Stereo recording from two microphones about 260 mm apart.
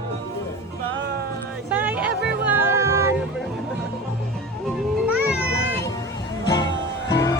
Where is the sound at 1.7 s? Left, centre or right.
Centre.